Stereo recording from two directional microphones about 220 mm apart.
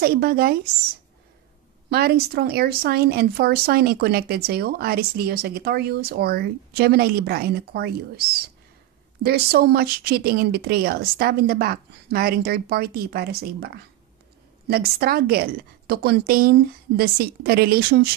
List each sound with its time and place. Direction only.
0.0 s speech: 45° right (ahead or behind)
1.9 s speech: 45° right (ahead or behind)